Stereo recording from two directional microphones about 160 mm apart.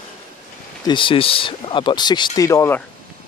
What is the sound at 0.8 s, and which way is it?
Speech, 30° left (ahead or behind).